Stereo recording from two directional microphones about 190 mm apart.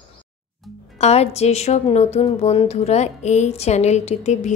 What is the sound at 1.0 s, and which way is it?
A woman's voice, 35° left (ahead or behind).